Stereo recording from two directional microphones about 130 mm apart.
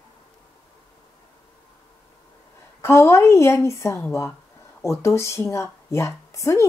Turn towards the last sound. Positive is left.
turn(degrees=25)  # may be behind; listen again after turning